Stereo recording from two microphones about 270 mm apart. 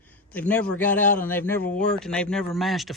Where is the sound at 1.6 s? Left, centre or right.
Left.